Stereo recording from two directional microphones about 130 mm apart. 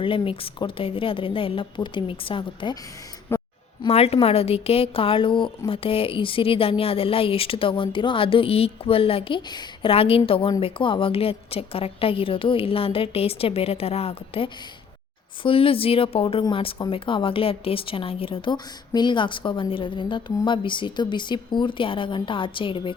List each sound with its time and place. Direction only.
0.0 s a woman's voice: 45° left (ahead or behind)
3.3 s a sound: 15° left (ahead or behind)
3.8 s a woman's voice: 50° left (ahead or behind)
9.9 s a woman's voice: 45° left (ahead or behind)